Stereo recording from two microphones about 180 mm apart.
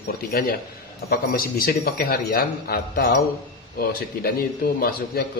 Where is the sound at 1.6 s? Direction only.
55° left (ahead or behind).